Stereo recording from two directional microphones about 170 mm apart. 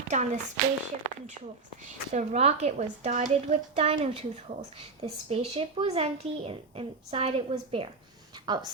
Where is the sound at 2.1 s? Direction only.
40° right (ahead or behind).